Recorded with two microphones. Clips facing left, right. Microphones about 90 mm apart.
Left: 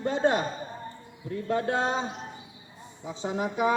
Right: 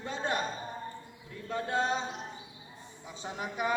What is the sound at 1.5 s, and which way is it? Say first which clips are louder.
Speech: left 4 dB; 75° left (ahead or behind).